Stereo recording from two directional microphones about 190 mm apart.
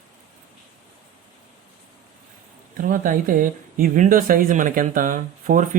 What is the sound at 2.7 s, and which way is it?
Speech, 45° right (ahead or behind).